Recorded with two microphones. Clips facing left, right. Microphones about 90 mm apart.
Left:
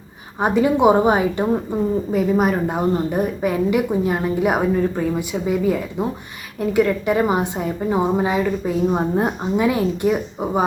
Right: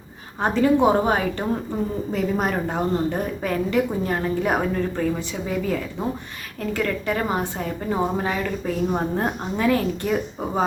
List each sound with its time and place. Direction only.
0.3 s a woman's voice: 15° left (ahead or behind)